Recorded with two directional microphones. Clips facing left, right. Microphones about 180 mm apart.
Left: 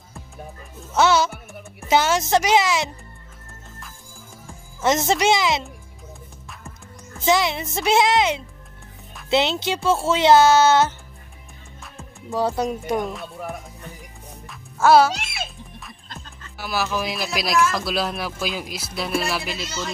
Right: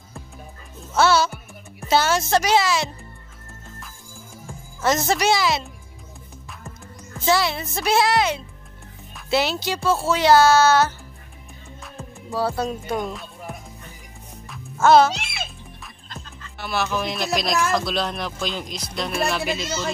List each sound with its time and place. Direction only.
0.9 s speech: 20° left (ahead or behind)
4.8 s speech: 20° left (ahead or behind)
7.2 s speech: 20° left (ahead or behind)
12.3 s speech: 15° left (ahead or behind)
14.5 s music: 5° left (ahead or behind)
16.5 s speech: 5° left (ahead or behind)